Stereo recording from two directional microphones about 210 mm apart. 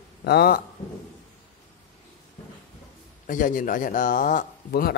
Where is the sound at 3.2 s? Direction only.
40° left (ahead or behind).